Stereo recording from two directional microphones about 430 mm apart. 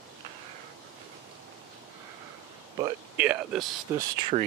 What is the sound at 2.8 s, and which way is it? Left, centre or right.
Speech, centre.